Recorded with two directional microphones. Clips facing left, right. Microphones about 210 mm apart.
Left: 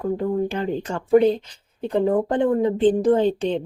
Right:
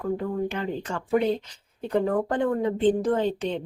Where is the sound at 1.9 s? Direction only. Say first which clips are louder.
Left 4 dB; 20° left (ahead or behind).